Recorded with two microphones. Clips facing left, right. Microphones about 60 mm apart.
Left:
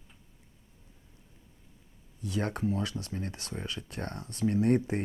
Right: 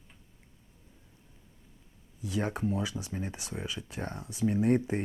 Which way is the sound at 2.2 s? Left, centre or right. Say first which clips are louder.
Even; centre.